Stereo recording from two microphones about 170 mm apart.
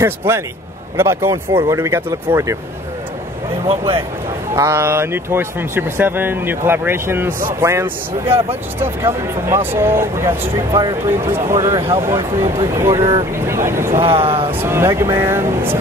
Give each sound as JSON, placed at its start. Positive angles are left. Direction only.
{"t": 0.9, "sound": "speech", "side_deg": -15}
{"t": 3.6, "sound": "speech", "side_deg": -35}
{"t": 4.6, "sound": "speech", "side_deg": -15}
{"t": 8.3, "sound": "speech", "side_deg": -35}
{"t": 8.8, "sound": "speech", "side_deg": -15}
{"t": 12.4, "sound": "speech", "side_deg": -35}
{"t": 12.7, "sound": "speech", "side_deg": -20}
{"t": 13.9, "sound": "speech", "side_deg": -35}
{"t": 14.5, "sound": "speech", "side_deg": -15}